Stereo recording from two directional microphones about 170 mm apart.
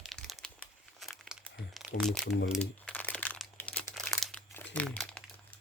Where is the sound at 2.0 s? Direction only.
Centre (ahead or behind).